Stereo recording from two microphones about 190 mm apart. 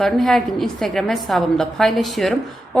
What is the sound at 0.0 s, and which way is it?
A woman's voice, centre (ahead or behind).